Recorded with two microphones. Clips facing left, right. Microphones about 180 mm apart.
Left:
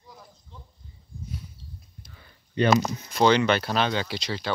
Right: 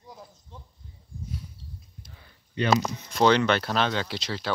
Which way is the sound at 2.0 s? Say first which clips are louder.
Even; 45° left (ahead or behind).